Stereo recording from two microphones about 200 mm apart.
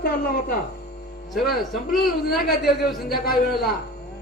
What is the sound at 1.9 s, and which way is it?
A man's voice, 50° left (ahead or behind).